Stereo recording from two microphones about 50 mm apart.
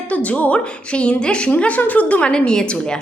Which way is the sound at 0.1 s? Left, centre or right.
Left.